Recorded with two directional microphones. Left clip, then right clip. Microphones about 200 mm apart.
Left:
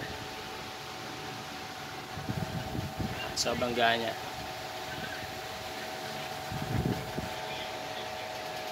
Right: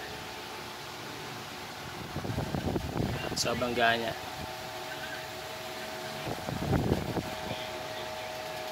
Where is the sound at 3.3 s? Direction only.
10° right (ahead or behind).